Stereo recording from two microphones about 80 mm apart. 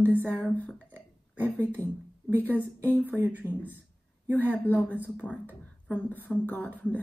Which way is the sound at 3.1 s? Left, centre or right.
Right.